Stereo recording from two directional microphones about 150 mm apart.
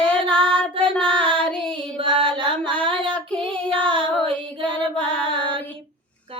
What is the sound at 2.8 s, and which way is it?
Child singing, 35° right (ahead or behind).